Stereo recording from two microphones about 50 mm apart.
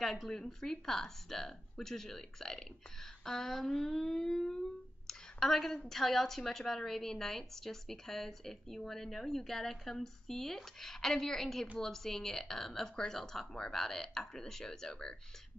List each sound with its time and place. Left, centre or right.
0.0 s a woman's voice: centre